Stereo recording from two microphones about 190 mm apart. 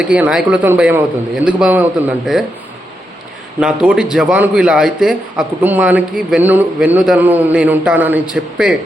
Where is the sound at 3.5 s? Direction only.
5° right (ahead or behind).